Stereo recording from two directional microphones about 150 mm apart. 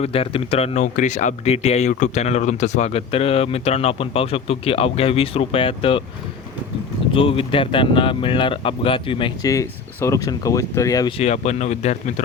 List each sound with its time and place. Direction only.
0.0 s speech: 40° left (ahead or behind)
7.1 s speech: 35° left (ahead or behind)
9.4 s speech: 20° left (ahead or behind)
11.2 s speech: 50° left (ahead or behind)